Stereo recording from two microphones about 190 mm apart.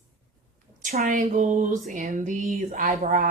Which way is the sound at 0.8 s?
45° right (ahead or behind).